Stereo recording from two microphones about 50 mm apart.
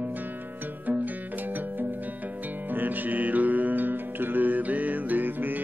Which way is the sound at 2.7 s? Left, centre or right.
Right.